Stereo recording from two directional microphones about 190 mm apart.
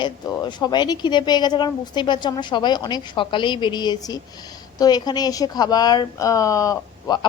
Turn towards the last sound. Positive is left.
turn(degrees=15)  # may be behind; listen again after turning